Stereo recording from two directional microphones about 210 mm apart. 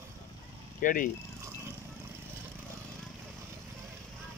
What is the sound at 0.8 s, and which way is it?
Speech, 40° left (ahead or behind).